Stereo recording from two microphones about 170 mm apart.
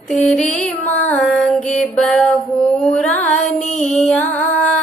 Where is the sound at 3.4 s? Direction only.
45° left (ahead or behind).